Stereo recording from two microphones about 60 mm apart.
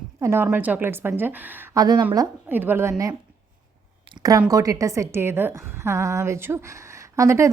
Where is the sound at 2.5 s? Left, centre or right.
Right.